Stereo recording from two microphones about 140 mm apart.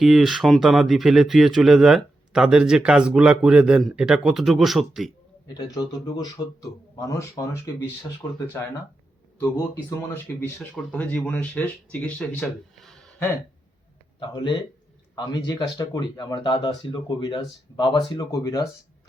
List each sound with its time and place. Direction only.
0.0 s a man's voice: centre (ahead or behind)
5.5 s a man's voice: 30° left (ahead or behind)
10.3 s speech: 15° left (ahead or behind)
14.2 s a man's voice: 30° left (ahead or behind)